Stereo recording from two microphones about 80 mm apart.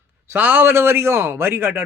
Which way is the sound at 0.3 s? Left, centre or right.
Right.